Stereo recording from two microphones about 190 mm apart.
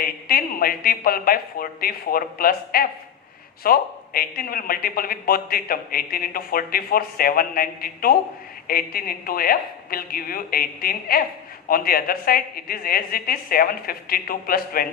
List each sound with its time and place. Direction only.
0.0 s speech: 50° left (ahead or behind)